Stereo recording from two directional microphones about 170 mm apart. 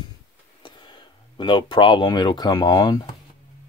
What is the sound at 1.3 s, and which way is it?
Speech, 30° left (ahead or behind).